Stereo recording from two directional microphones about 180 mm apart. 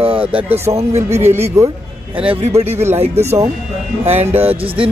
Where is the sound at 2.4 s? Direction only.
35° right (ahead or behind).